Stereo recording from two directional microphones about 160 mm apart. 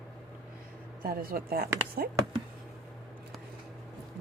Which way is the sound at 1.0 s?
65° right (ahead or behind).